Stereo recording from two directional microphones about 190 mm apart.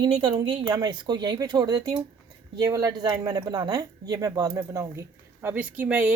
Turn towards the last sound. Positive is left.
turn(degrees=-5)  # may be behind; listen again after turning